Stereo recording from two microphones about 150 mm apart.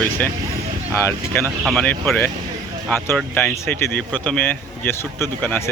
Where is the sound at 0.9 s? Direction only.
15° left (ahead or behind).